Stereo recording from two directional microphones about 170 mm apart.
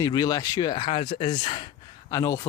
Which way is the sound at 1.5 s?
25° left (ahead or behind).